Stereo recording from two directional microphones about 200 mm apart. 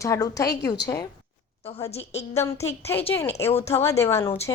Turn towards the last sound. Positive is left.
turn(degrees=15)  # may be behind; listen again after turning